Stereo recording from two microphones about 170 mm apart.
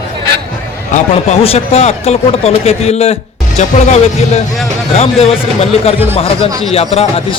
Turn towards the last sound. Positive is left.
turn(degrees=35)  # may be behind; listen again after turning